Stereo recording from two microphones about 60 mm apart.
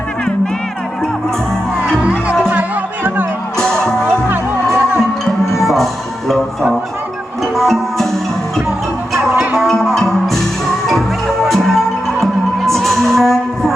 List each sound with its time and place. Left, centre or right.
2.0 s music: right
2.5 s music: right
3.6 s music: centre
4.0 s music: right
5.5 s music: centre
9.6 s music: centre
11.4 s music: centre